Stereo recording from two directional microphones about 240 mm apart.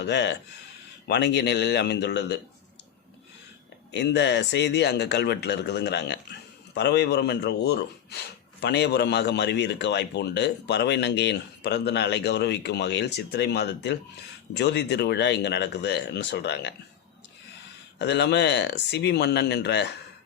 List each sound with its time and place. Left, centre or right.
0.0 s a man's voice: left
3.9 s a man's voice: left
18.0 s a man's voice: left